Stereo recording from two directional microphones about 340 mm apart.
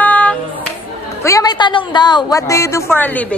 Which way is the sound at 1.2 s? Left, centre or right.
Centre.